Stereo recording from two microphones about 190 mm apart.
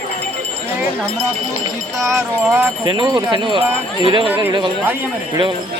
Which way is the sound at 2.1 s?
15° right (ahead or behind).